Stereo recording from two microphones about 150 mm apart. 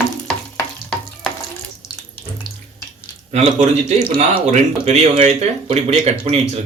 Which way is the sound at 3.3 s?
50° right (ahead or behind).